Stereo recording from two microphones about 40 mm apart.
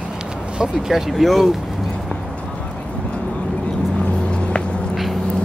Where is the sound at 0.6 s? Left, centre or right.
Centre.